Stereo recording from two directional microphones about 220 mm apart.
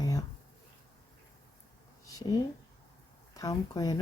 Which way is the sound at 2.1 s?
15° left (ahead or behind).